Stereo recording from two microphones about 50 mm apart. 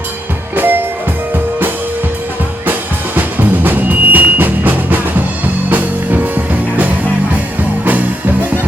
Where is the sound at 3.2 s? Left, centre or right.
Right.